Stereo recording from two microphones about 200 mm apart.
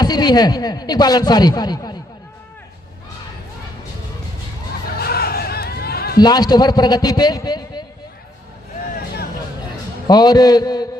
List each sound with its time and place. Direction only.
0.0 s speech: 20° left (ahead or behind)
4.9 s chatter: 50° left (ahead or behind)
6.1 s speech: 20° left (ahead or behind)
10.1 s speech: 20° left (ahead or behind)